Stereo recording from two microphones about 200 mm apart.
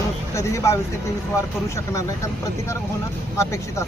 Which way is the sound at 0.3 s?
15° left (ahead or behind).